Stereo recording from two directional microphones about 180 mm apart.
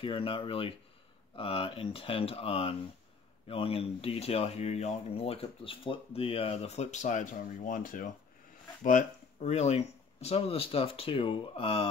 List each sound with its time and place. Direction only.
0.0 s speech: 30° left (ahead or behind)